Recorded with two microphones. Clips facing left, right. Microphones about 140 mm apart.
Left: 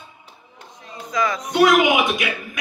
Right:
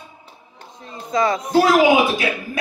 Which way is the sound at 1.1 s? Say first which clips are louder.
Right 4 dB; 30° right (ahead or behind).